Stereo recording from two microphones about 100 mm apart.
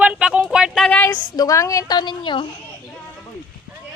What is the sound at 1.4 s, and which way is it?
A woman's voice, 35° left (ahead or behind).